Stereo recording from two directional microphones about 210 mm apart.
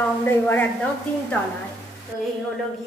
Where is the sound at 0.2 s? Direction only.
10° left (ahead or behind).